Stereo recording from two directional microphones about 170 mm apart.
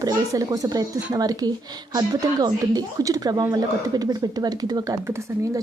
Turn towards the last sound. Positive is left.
turn(degrees=-20)  # may be behind; listen again after turning